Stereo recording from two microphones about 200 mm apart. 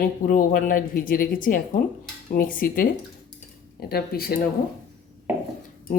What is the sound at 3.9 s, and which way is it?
Speech, 50° left (ahead or behind).